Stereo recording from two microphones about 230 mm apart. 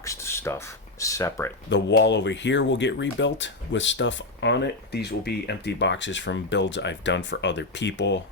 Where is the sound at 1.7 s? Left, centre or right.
Left.